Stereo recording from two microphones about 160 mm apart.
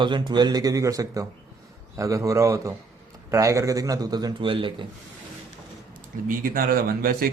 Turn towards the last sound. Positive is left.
turn(degrees=-70)  # may be behind; listen again after turning